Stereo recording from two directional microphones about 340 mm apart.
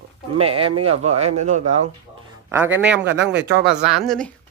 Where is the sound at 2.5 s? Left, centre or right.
Centre.